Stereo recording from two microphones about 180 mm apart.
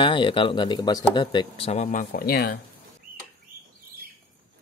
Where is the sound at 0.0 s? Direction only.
25° left (ahead or behind).